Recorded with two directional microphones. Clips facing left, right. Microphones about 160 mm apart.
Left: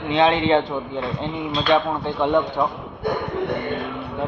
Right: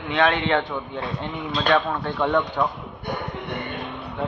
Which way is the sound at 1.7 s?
15° left (ahead or behind).